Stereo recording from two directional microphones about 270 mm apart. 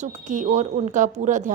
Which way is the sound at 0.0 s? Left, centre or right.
Right.